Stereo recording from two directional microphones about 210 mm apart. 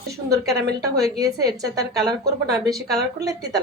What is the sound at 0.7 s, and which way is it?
Speech, 50° right (ahead or behind).